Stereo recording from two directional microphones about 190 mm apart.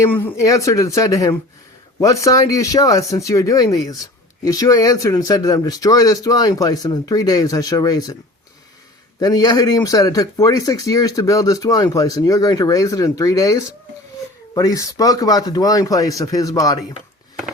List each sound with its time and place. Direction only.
0.0 s speech: 15° left (ahead or behind)
9.2 s speech: 20° left (ahead or behind)